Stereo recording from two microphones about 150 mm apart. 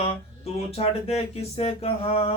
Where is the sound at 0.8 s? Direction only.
40° left (ahead or behind).